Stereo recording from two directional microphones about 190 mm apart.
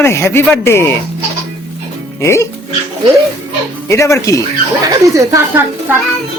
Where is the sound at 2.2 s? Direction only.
15° left (ahead or behind).